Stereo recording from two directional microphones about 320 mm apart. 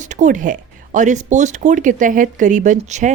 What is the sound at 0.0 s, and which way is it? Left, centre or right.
Speech, right.